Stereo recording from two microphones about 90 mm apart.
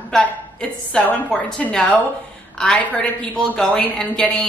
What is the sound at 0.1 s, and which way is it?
A woman's voice, 10° left (ahead or behind).